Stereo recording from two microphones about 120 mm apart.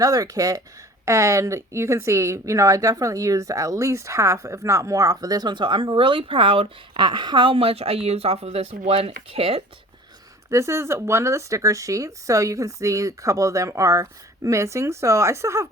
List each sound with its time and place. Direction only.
0.0 s speech: 30° right (ahead or behind); by 9.6 s 55° right (ahead or behind)
10.5 s speech: 25° right (ahead or behind)